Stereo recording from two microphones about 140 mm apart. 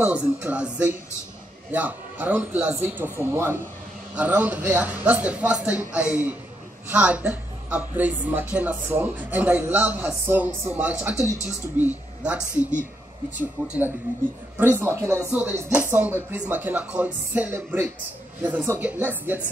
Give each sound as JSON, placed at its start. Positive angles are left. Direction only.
{"t": 0.0, "sound": "a woman's voice", "side_deg": -10}